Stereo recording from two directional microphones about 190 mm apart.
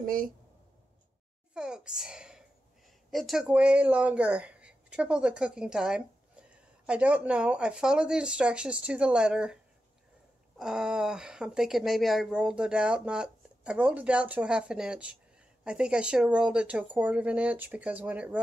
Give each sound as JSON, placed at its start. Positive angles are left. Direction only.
{"t": 0.0, "sound": "speech", "side_deg": -45}
{"t": 1.5, "sound": "a woman's voice", "side_deg": -5}
{"t": 10.6, "sound": "speech", "side_deg": -5}